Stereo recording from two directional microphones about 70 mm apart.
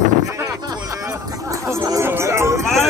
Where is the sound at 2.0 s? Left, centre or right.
Right.